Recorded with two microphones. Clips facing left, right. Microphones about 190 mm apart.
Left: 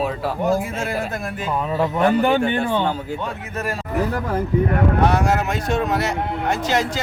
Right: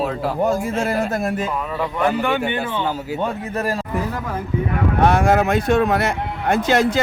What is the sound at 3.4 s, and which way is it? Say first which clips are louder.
Speech: right 4 dB; 35° right (ahead or behind).